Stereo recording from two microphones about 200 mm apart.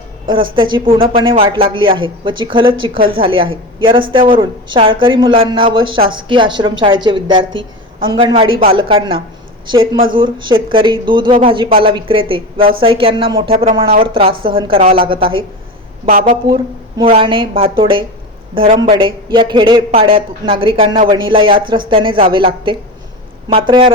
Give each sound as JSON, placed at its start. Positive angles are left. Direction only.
{"t": 0.3, "sound": "a woman's voice", "side_deg": -25}
{"t": 16.0, "sound": "speech", "side_deg": -40}
{"t": 17.0, "sound": "a woman's voice", "side_deg": -25}